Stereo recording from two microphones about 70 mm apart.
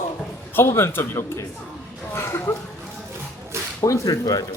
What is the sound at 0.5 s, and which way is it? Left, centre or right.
A man's voice, left.